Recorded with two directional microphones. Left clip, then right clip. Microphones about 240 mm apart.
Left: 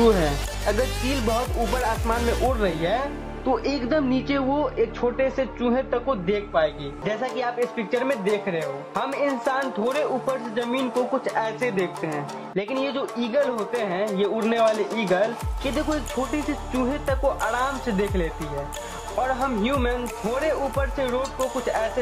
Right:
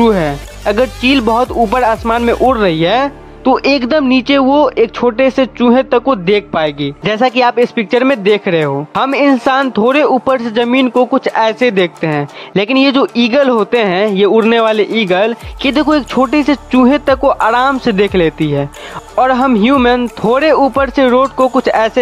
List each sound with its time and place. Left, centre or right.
0.0 s speech: right
6.5 s speech: right